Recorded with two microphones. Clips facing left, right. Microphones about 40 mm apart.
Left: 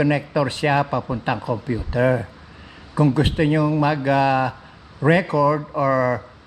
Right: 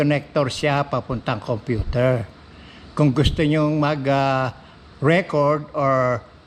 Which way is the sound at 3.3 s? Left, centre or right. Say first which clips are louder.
Even; left.